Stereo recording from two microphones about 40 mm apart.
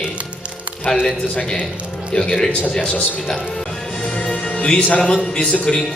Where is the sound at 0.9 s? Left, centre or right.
Centre.